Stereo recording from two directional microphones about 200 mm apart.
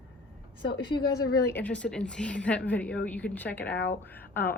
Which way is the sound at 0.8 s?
15° left (ahead or behind).